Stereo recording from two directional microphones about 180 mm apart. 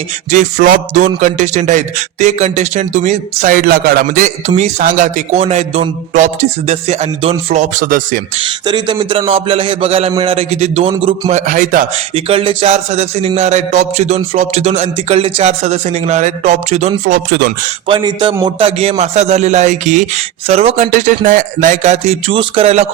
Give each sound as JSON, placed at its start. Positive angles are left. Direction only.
{"t": 0.3, "sound": "speech", "side_deg": -45}
{"t": 4.4, "sound": "music", "side_deg": -40}
{"t": 8.4, "sound": "music", "side_deg": -25}
{"t": 12.1, "sound": "music", "side_deg": -30}
{"t": 17.1, "sound": "speech", "side_deg": -65}
{"t": 17.8, "sound": "speech", "side_deg": -25}
{"t": 18.4, "sound": "music", "side_deg": -35}
{"t": 20.8, "sound": "speech", "side_deg": -45}
{"t": 21.2, "sound": "music", "side_deg": -50}